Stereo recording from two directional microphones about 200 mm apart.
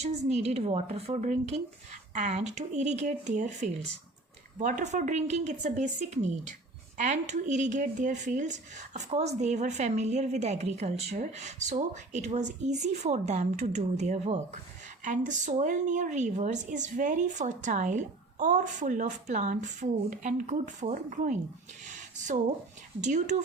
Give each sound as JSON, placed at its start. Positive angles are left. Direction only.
{"t": 0.0, "sound": "speech", "side_deg": -35}
{"t": 21.8, "sound": "a sound", "side_deg": -40}
{"t": 23.0, "sound": "speech", "side_deg": -35}